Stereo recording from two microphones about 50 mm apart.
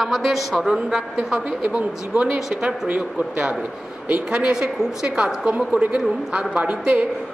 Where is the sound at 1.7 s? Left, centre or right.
Right.